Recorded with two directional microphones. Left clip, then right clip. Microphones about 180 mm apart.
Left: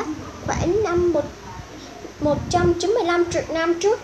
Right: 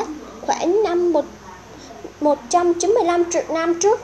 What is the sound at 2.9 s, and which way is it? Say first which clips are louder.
Speech: right 2 dB; 20° right (ahead or behind).